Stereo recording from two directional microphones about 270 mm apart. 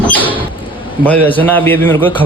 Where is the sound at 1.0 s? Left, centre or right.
Centre.